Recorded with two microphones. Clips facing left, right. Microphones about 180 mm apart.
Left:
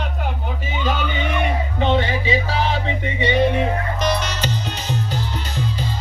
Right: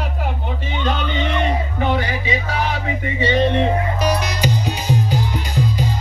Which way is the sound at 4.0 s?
10° right (ahead or behind).